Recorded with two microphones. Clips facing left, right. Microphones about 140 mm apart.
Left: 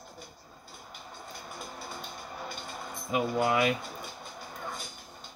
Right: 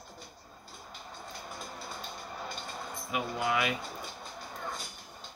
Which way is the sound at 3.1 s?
30° left (ahead or behind).